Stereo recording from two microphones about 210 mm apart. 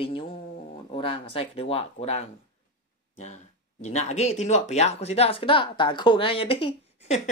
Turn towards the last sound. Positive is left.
turn(degrees=30)  # may be behind; listen again after turning